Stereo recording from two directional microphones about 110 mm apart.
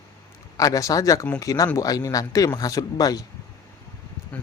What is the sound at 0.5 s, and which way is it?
Speech, 30° left (ahead or behind).